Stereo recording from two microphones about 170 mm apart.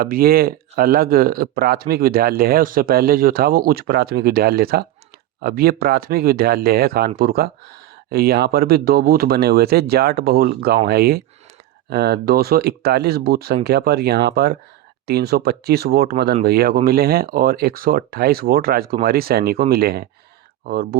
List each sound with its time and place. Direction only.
0.0 s speech: 60° right (ahead or behind)